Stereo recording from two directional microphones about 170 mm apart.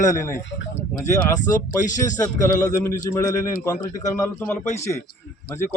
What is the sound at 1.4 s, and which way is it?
Speech, 20° left (ahead or behind).